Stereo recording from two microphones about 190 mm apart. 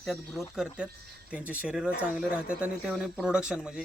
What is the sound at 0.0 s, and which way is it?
Speech, centre (ahead or behind).